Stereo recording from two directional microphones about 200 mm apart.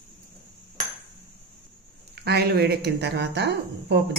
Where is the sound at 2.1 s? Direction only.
55° right (ahead or behind).